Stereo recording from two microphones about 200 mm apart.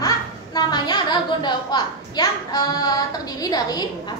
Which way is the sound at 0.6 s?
20° left (ahead or behind).